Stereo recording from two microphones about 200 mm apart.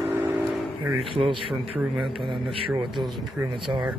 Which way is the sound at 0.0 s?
10° right (ahead or behind).